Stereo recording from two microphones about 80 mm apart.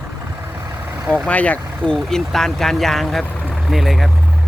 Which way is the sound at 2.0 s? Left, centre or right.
Centre.